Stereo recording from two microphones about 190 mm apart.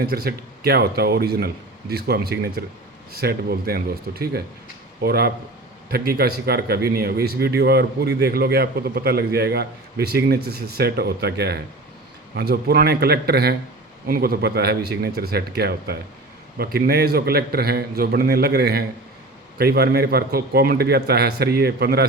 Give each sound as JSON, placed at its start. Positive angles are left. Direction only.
{"t": 0.0, "sound": "speech", "side_deg": -55}